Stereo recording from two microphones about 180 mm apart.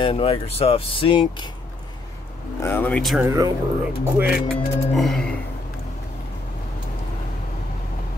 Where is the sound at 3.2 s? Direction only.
20° right (ahead or behind).